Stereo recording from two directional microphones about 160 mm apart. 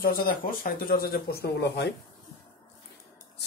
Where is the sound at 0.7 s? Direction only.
65° left (ahead or behind); by 2.0 s 90° left.